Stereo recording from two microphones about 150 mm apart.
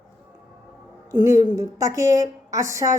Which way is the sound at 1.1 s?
20° right (ahead or behind).